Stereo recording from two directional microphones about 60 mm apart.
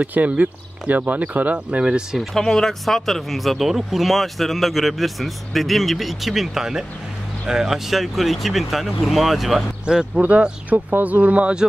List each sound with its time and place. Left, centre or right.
0.0 s speech: right
2.3 s speech: centre
10.2 s speech: right